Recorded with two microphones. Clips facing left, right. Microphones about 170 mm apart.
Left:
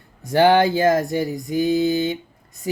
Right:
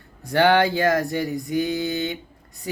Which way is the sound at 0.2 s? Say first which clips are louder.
Left 3 dB; 25° left (ahead or behind).